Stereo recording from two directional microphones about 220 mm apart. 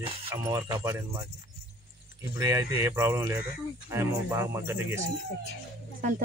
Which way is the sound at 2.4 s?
15° right (ahead or behind).